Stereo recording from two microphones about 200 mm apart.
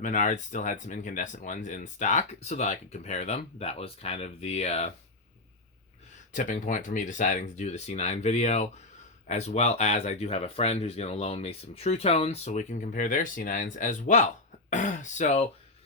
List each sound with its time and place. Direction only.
0.0 s speech: 40° left (ahead or behind)
6.3 s speech: 40° left (ahead or behind)